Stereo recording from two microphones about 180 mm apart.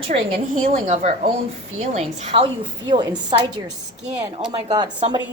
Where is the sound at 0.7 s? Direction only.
35° right (ahead or behind).